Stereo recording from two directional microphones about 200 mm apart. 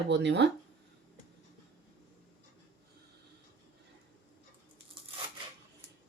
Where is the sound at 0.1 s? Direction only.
60° right (ahead or behind).